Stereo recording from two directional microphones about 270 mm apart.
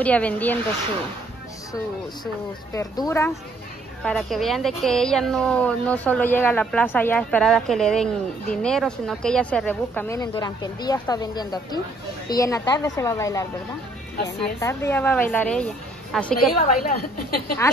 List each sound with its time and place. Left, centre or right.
0.0 s speech: centre
2.7 s speech: centre
16.5 s a woman's voice: left